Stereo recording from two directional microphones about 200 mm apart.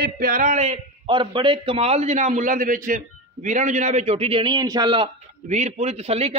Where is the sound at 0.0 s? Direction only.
45° right (ahead or behind).